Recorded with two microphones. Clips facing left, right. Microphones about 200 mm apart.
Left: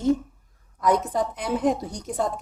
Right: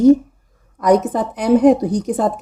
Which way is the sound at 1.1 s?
85° right.